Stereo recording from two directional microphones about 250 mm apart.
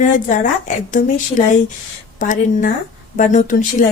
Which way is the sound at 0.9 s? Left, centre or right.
Left.